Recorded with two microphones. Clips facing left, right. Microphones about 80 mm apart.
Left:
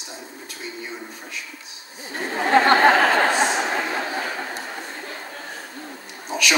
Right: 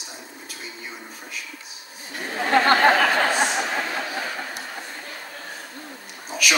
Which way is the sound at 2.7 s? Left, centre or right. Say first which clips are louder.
Left 2 dB; left.